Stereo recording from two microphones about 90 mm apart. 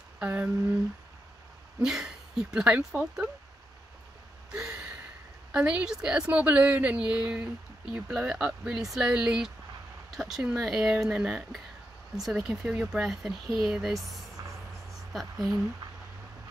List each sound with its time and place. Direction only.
0.2 s a woman's voice: 15° right (ahead or behind)
1.8 s a woman's voice: 5° right (ahead or behind)
4.5 s a sound: 10° right (ahead or behind)
5.5 s a woman's voice: 10° right (ahead or behind)